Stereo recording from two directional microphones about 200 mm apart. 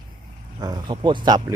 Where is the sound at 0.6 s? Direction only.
20° right (ahead or behind).